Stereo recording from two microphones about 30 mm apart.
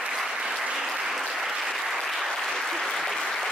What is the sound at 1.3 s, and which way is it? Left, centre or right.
Applause, centre.